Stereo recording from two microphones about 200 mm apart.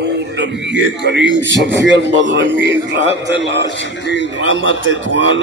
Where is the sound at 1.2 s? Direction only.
65° right (ahead or behind).